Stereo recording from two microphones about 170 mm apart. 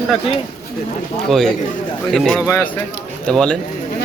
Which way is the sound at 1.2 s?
Centre (ahead or behind).